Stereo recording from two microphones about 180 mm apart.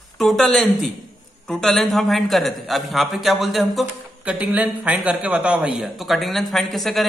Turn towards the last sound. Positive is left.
turn(degrees=0)  # may be behind; listen again after turning